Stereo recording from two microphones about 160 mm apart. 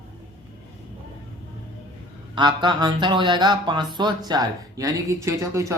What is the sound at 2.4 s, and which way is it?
Speech, 30° right (ahead or behind).